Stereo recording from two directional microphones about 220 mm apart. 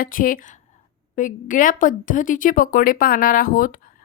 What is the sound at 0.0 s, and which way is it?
A woman's voice, 40° left (ahead or behind).